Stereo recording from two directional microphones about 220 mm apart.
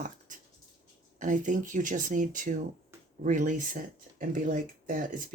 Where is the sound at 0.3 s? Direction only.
35° right (ahead or behind).